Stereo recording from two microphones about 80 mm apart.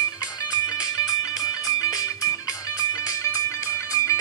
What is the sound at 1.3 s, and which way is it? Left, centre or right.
Music, left.